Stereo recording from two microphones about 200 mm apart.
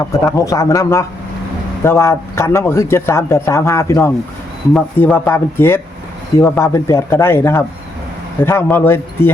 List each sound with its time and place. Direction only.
0.0 s speech: 15° left (ahead or behind)